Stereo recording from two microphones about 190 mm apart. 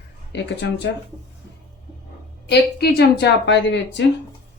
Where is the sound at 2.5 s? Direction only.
60° left (ahead or behind).